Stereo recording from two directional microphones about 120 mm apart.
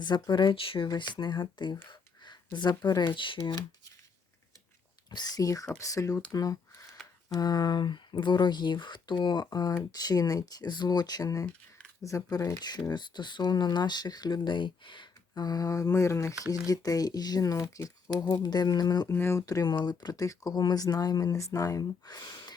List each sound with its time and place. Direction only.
0.0 s speech: 40° left (ahead or behind)
5.1 s speech: 35° left (ahead or behind)
6.3 s a sound: 30° left (ahead or behind)
7.3 s speech: 35° left (ahead or behind)
19.1 s speech: 20° left (ahead or behind)
19.6 s speech: 40° left (ahead or behind)